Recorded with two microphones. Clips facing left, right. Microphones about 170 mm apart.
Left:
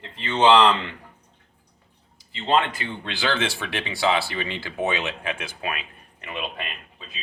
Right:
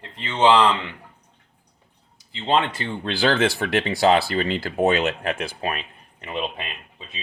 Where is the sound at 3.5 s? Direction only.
45° right (ahead or behind).